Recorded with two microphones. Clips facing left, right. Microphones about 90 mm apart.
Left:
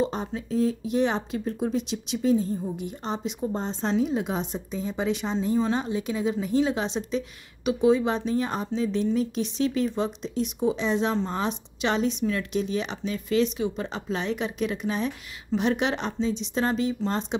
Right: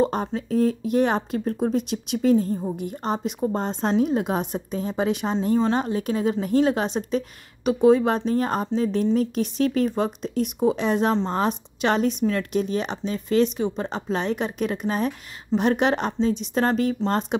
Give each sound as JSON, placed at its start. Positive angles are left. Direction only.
{"t": 0.0, "sound": "speech", "side_deg": -55}